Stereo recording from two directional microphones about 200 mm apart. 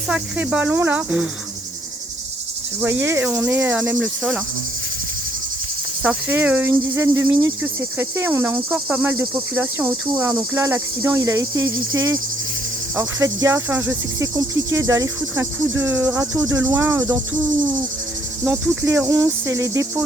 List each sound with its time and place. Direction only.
0.1 s cricket: 5° right (ahead or behind)
2.9 s insect: 70° right (ahead or behind)
3.2 s cricket: 10° right (ahead or behind)
6.0 s cricket: 5° right (ahead or behind)
18.4 s cricket: 5° right (ahead or behind)